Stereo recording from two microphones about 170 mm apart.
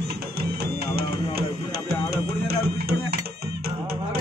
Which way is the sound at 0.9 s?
70° right (ahead or behind).